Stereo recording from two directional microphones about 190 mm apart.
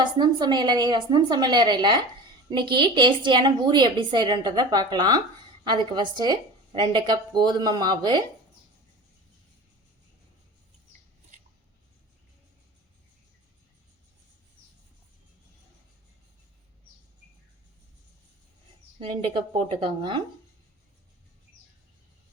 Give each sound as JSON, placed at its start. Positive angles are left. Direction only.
{"t": 0.0, "sound": "a woman's voice", "side_deg": -25}
{"t": 18.9, "sound": "a woman's voice", "side_deg": -25}